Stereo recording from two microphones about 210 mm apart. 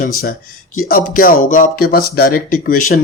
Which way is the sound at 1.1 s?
40° left (ahead or behind).